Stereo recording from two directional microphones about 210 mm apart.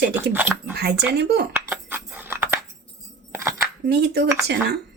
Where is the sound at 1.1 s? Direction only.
50° right (ahead or behind).